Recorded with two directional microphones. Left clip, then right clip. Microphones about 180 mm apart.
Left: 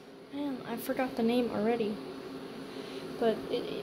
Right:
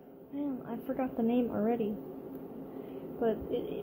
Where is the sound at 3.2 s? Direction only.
15° left (ahead or behind).